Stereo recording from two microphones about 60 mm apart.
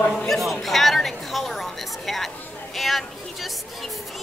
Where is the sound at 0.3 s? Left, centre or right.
Centre.